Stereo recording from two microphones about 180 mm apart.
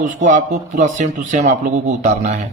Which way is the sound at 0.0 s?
45° right (ahead or behind).